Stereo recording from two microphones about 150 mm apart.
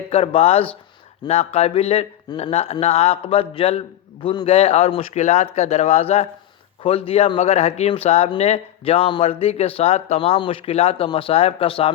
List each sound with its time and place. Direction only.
0.1 s a man's voice: 40° left (ahead or behind)